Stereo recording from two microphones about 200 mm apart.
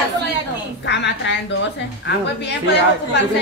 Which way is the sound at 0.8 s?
60° left (ahead or behind).